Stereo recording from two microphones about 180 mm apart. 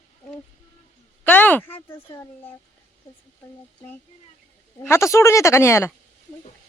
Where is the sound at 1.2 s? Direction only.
10° left (ahead or behind).